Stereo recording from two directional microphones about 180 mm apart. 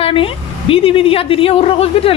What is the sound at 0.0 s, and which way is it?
Speech, 30° left (ahead or behind).